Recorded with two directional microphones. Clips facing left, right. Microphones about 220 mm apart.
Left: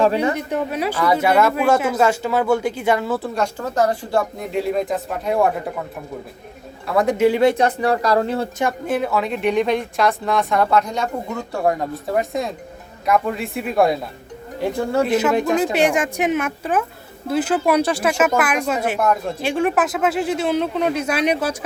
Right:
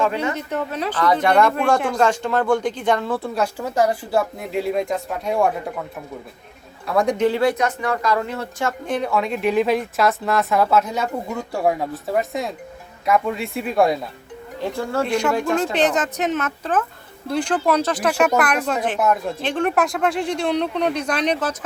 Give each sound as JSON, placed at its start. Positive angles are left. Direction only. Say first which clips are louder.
{"t": 0.0, "sound": "speech", "louder": "left 4 dB", "side_deg": 35}
{"t": 0.3, "sound": "speech", "louder": "left 3 dB", "side_deg": 15}
{"t": 6.8, "sound": "speech", "louder": "left 2 dB", "side_deg": 0}
{"t": 7.4, "sound": "speech", "louder": "left 4 dB", "side_deg": 30}
{"t": 8.6, "sound": "speech", "louder": "even", "side_deg": 5}
{"t": 14.6, "sound": "speech", "louder": "left 4 dB", "side_deg": 15}
{"t": 15.5, "sound": "speech", "louder": "left 2 dB", "side_deg": 5}
{"t": 18.9, "sound": "speech", "louder": "right 1 dB", "side_deg": -5}
{"t": 19.4, "sound": "speech", "louder": "left 1 dB", "side_deg": 10}